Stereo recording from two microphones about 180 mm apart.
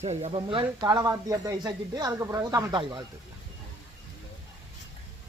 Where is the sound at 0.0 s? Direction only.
40° right (ahead or behind).